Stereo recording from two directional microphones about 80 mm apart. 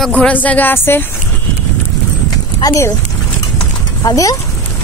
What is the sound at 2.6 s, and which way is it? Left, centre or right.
Speech, left.